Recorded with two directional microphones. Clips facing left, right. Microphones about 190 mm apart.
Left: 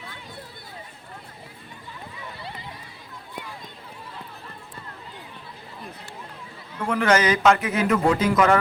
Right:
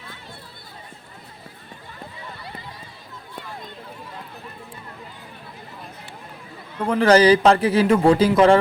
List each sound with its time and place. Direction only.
6.8 s speech: 35° right (ahead or behind)